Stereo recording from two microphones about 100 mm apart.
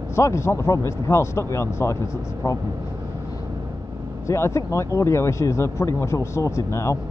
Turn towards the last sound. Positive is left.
turn(degrees=30)  # may be behind; listen again after turning